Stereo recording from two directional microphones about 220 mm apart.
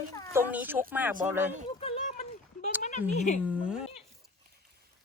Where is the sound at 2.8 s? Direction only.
35° left (ahead or behind).